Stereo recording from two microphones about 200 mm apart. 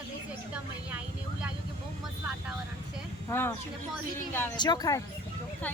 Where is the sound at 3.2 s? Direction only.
10° left (ahead or behind).